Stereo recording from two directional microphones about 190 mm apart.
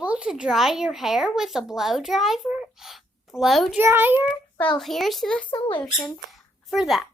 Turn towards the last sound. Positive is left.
turn(degrees=0)  # may be behind; listen again after turning